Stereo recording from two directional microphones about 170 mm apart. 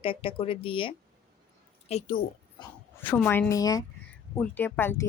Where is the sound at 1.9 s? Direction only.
40° left (ahead or behind).